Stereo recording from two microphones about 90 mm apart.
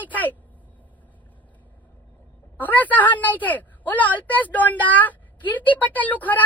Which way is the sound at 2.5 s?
20° left (ahead or behind).